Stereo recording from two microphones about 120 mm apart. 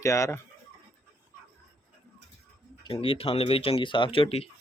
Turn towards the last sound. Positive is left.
turn(degrees=55)  # may be behind; listen again after turning